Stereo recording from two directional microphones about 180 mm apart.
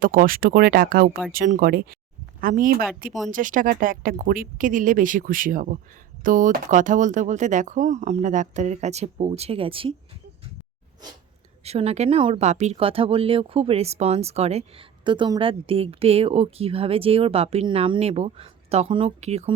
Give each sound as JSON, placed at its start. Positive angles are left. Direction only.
{"t": 0.0, "sound": "speech", "side_deg": -50}
{"t": 11.6, "sound": "speech", "side_deg": -35}